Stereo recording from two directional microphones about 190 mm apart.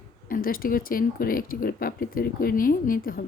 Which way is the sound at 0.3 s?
50° left (ahead or behind).